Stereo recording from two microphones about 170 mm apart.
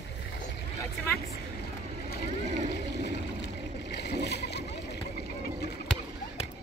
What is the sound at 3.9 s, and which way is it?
Splash, 80° left.